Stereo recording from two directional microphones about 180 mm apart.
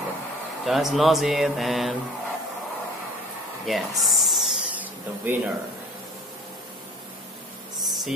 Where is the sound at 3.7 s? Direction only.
Centre (ahead or behind).